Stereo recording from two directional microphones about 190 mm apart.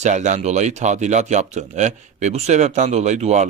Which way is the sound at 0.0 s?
40° right (ahead or behind).